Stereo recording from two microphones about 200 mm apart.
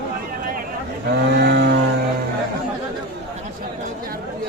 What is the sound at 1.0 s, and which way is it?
Vehicle, 55° right (ahead or behind).